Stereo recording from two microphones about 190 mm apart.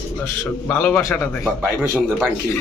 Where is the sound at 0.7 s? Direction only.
10° left (ahead or behind).